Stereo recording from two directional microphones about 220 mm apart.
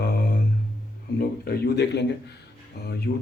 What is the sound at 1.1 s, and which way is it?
A man's voice, 45° left (ahead or behind).